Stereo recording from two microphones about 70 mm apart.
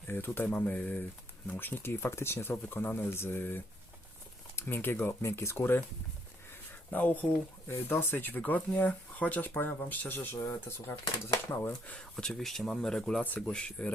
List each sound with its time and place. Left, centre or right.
0.3 s speech: left
6.9 s speech: left
7.7 s speech: left
11.9 s speech: centre
13.2 s speech: left